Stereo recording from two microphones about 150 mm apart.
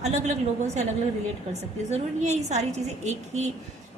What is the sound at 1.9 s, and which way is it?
A woman's voice, 50° right (ahead or behind).